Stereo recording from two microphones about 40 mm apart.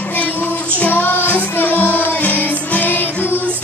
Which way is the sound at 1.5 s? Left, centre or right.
Left.